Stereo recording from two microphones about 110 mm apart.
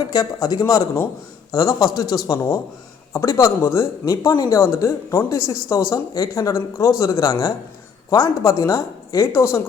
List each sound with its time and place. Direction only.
0.1 s speech: 35° left (ahead or behind)